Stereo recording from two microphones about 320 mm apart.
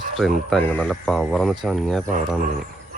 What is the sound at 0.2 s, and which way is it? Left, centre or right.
Speech, centre.